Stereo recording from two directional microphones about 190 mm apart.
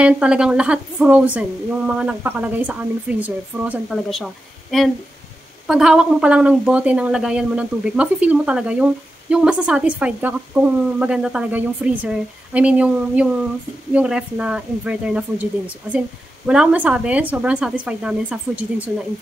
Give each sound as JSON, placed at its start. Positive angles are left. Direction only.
{"t": 0.0, "sound": "a woman's voice", "side_deg": -5}
{"t": 16.4, "sound": "a woman's voice", "side_deg": -5}